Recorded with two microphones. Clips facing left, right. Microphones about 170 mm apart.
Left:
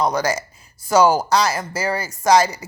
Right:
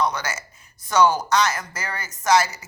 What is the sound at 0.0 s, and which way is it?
A woman's voice, 35° left (ahead or behind).